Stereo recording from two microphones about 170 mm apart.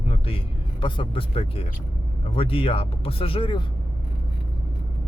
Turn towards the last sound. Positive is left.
turn(degrees=30)  # may be behind; listen again after turning